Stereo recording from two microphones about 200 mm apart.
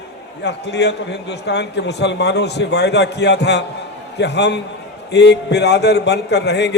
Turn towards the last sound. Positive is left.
turn(degrees=60)  # may be behind; listen again after turning